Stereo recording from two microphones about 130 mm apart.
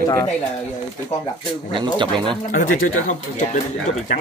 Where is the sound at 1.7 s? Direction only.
40° right (ahead or behind).